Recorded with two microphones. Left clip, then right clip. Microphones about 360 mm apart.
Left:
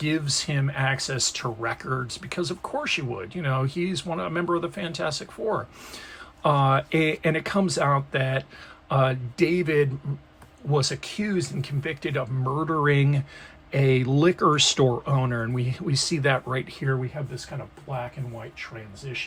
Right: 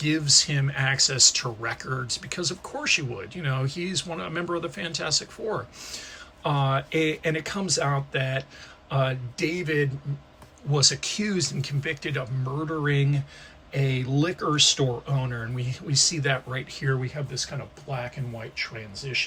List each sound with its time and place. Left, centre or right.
0.0 s speech: centre
16.9 s speech: centre